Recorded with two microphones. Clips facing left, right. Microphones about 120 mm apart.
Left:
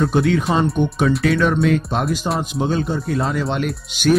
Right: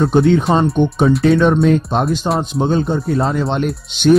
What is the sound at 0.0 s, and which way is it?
Speech, 25° right (ahead or behind).